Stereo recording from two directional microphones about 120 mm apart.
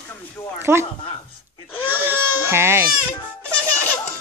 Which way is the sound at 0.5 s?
20° right (ahead or behind).